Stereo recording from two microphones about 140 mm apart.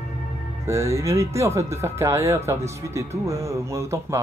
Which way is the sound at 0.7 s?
20° right (ahead or behind).